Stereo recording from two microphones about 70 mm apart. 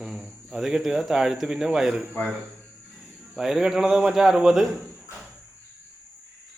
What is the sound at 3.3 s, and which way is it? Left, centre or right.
Speech, centre.